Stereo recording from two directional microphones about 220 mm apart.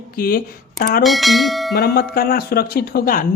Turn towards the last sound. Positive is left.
turn(degrees=40)  # may be behind; listen again after turning